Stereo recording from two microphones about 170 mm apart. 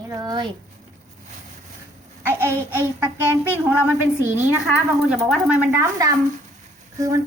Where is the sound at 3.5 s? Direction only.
10° right (ahead or behind).